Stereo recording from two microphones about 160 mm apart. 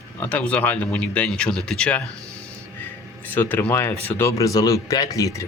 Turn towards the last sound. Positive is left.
turn(degrees=20)  # may be behind; listen again after turning